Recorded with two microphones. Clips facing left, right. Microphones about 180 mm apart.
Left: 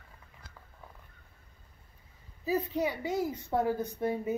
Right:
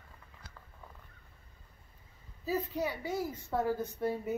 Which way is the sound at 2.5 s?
15° left (ahead or behind).